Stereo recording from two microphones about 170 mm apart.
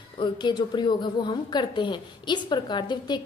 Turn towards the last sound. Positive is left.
turn(degrees=25)  # may be behind; listen again after turning